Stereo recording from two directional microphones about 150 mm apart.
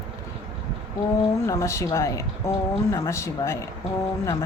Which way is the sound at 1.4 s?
20° left (ahead or behind).